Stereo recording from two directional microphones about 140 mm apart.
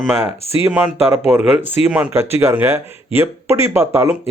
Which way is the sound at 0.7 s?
15° right (ahead or behind).